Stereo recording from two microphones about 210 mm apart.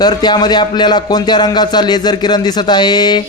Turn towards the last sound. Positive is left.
turn(degrees=20)  # may be behind; listen again after turning